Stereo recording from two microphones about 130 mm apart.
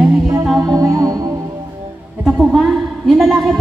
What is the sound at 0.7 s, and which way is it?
Music, 25° right (ahead or behind).